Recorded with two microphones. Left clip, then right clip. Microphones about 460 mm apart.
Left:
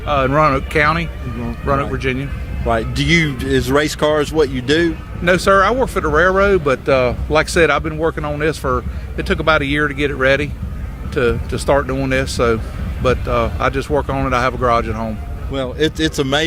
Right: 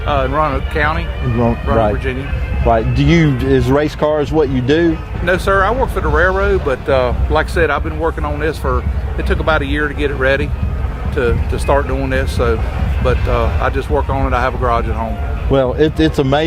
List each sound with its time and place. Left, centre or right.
0.2 s speech: left
2.0 s speech: left
2.6 s speech: centre
5.2 s speech: left
15.8 s speech: centre